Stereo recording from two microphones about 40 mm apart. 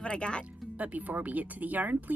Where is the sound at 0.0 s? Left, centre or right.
Left.